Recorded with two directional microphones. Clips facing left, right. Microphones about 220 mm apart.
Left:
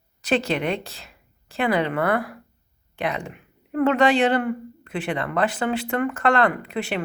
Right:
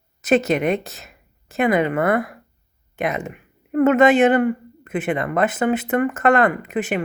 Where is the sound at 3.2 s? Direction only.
5° right (ahead or behind).